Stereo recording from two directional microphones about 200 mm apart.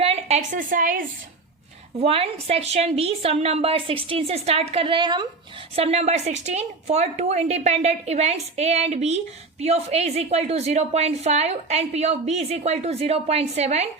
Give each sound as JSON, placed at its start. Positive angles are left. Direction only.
{"t": 0.0, "sound": "a woman's voice", "side_deg": -30}
{"t": 2.0, "sound": "a woman's voice", "side_deg": -30}